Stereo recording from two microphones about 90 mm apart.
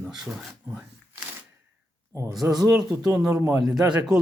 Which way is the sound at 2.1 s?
35° right (ahead or behind).